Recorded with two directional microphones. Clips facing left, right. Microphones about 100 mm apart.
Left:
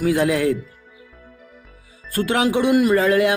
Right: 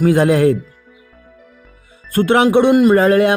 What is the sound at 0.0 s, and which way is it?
Speech, 40° right (ahead or behind).